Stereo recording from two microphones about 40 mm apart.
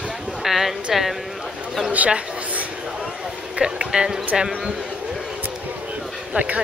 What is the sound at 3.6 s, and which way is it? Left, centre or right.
Speech, right.